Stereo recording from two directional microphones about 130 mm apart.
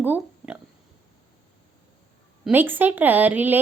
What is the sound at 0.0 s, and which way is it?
Oink, 15° right (ahead or behind).